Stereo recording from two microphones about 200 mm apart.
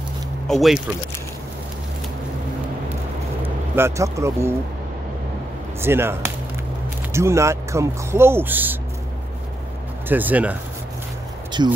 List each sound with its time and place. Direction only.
0.5 s speech: centre (ahead or behind)
3.7 s speech: 15° right (ahead or behind)
5.8 s speech: 10° right (ahead or behind)
10.0 s speech: 10° right (ahead or behind)
11.6 s speech: 20° right (ahead or behind)